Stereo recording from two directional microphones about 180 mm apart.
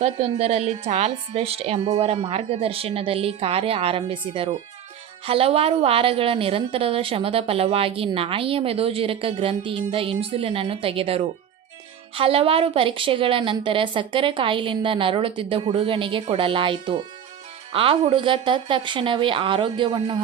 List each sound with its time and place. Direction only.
0.0 s a woman's voice: 35° right (ahead or behind)